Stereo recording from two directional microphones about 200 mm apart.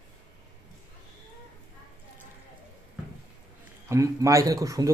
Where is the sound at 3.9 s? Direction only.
15° right (ahead or behind).